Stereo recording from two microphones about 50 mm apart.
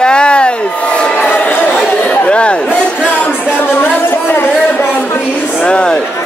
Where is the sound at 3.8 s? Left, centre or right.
Left.